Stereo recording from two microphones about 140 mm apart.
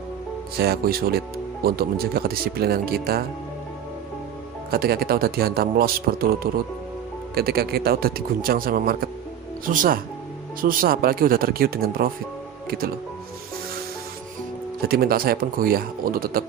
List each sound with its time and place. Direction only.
0.5 s speech: 90° right
4.7 s speech: 90° right
9.6 s speech: 75° right (ahead or behind)
10.6 s speech: 90° right
14.8 s speech: 90° right